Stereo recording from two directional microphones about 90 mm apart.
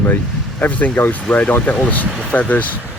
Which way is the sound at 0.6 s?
15° left (ahead or behind).